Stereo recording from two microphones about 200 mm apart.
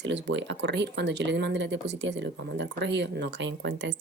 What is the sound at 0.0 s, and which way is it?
Speech, 60° right (ahead or behind).